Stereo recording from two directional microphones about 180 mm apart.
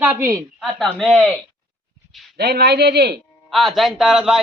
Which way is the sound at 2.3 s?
65° right (ahead or behind).